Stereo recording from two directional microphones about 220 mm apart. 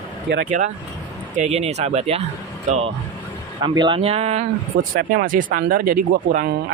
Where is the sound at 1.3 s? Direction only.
30° right (ahead or behind).